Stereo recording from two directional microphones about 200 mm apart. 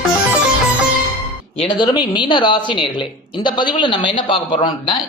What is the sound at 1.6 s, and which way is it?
Speech, 20° left (ahead or behind).